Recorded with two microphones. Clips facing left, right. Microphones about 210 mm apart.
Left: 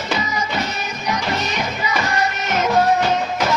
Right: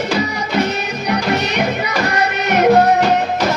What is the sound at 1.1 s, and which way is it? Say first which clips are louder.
Music: right 5 dB; 65° right (ahead or behind).